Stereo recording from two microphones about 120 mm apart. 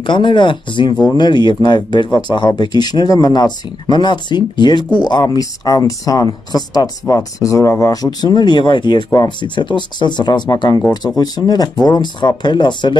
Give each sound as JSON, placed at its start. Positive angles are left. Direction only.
{"t": 0.0, "sound": "speech", "side_deg": 40}